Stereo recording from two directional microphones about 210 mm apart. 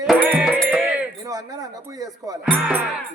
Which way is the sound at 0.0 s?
Centre (ahead or behind).